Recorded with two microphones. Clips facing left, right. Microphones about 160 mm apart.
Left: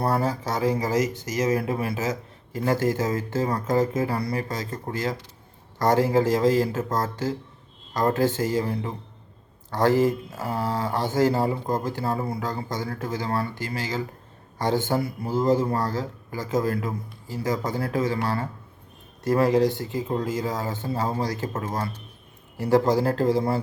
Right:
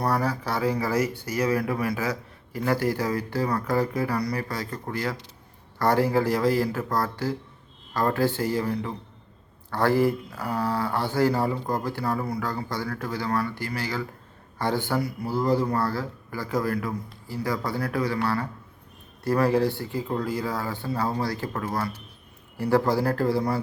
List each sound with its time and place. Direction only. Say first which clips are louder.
0.0 s speech: left 1 dB; 25° left (ahead or behind)
10.3 s speech: even; 40° left (ahead or behind)
11.1 s speech: left 2 dB; 20° left (ahead or behind)
15.7 s speech: even; 40° left (ahead or behind)
16.5 s speech: left 2 dB; 20° left (ahead or behind)
19.3 s speech: left 2 dB; 20° left (ahead or behind)